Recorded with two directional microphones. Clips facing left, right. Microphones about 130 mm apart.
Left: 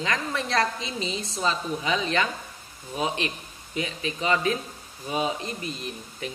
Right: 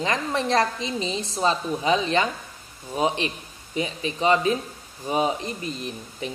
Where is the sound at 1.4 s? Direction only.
25° right (ahead or behind).